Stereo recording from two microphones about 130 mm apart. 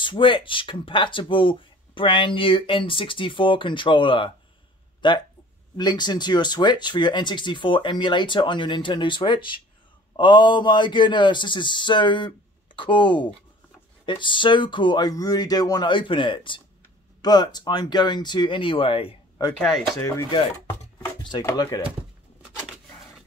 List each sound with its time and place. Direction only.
0.0 s speech: 40° left (ahead or behind)
21.5 s speech: 25° left (ahead or behind)